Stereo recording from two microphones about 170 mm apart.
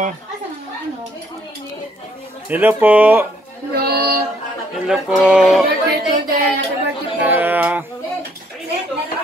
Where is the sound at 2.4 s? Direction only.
10° right (ahead or behind).